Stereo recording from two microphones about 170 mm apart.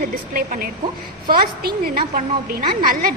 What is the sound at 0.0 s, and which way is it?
A woman's voice, 55° right (ahead or behind).